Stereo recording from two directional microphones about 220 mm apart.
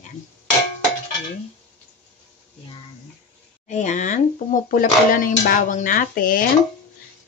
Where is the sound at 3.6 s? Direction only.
35° left (ahead or behind).